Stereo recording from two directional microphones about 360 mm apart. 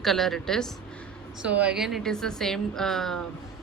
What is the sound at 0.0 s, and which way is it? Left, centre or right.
Speech, centre.